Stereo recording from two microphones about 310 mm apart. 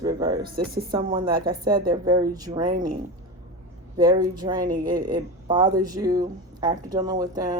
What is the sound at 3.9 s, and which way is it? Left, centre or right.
Speech, centre.